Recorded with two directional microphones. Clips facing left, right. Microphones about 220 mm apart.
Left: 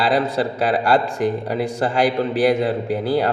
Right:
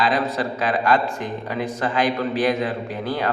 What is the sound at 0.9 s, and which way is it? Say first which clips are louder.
Speech: left 4 dB; 35° left (ahead or behind).